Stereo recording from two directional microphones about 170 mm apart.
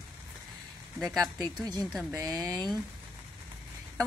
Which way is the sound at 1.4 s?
25° right (ahead or behind).